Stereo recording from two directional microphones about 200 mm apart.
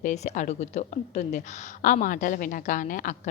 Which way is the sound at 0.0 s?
35° left (ahead or behind).